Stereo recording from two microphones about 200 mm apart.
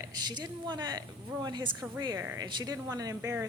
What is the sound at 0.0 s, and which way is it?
A woman's voice, 20° right (ahead or behind).